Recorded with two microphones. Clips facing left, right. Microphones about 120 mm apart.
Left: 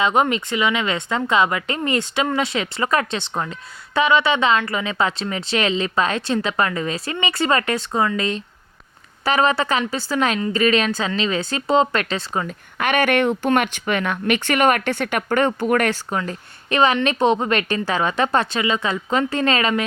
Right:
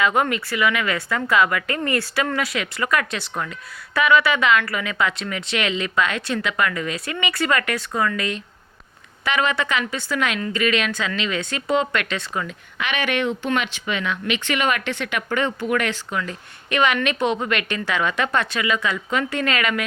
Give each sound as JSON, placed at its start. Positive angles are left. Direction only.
{"t": 0.0, "sound": "a woman's voice", "side_deg": 20}
{"t": 12.8, "sound": "speech", "side_deg": 50}